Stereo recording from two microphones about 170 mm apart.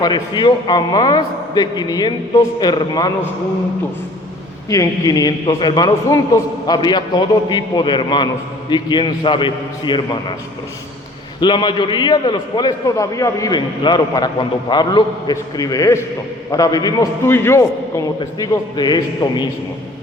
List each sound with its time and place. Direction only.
0.0 s a man's voice: 25° left (ahead or behind)
4.7 s a man's voice: 20° left (ahead or behind)
11.3 s a man's voice: 25° left (ahead or behind)